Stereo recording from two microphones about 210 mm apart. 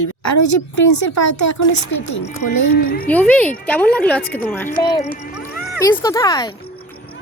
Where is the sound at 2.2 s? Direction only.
50° left (ahead or behind).